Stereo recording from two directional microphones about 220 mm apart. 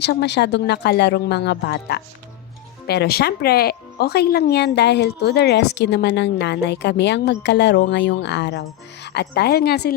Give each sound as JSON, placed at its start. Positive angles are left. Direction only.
{"t": 0.0, "sound": "speech", "side_deg": 50}